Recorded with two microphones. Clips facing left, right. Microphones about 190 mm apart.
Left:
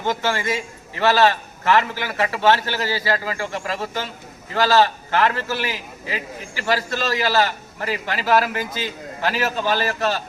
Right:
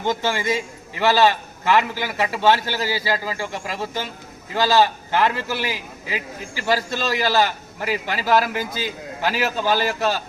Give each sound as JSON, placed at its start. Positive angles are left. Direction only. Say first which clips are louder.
{"t": 0.0, "sound": "a man's voice", "louder": "even", "side_deg": -15}